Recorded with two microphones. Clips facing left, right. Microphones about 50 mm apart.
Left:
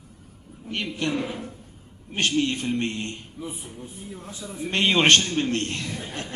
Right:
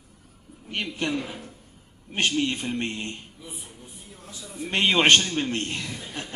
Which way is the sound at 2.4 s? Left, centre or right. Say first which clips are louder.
Left 2 dB; centre.